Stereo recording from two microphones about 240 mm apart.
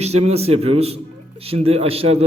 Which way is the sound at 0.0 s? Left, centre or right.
Right.